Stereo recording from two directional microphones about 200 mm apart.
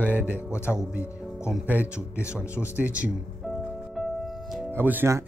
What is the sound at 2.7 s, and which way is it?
Speech, 5° right (ahead or behind).